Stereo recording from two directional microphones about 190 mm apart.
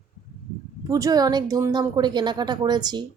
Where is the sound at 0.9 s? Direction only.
20° right (ahead or behind).